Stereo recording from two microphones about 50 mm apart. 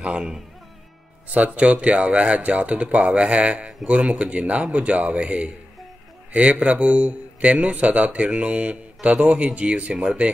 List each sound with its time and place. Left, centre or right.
0.0 s speech: right
1.3 s speech: right